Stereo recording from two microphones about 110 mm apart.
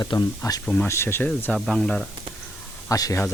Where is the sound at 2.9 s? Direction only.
30° left (ahead or behind).